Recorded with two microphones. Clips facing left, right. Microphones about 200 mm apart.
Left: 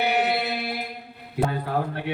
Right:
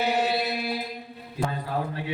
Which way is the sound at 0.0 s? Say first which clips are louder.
Left 1 dB; 65° left (ahead or behind).